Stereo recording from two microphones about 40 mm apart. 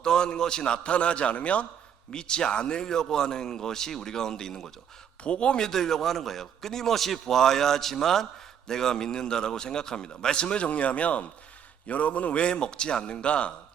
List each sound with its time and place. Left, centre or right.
0.0 s a man's voice: centre
2.1 s a man's voice: centre
5.2 s a man's voice: left
5.6 s a man's voice: centre; by 12.4 s left
12.4 s a man's voice: left